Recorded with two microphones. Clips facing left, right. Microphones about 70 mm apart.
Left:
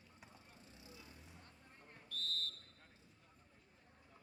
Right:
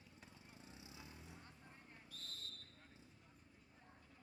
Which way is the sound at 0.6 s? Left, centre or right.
Centre.